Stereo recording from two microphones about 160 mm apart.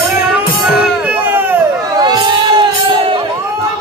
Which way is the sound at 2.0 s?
25° right (ahead or behind).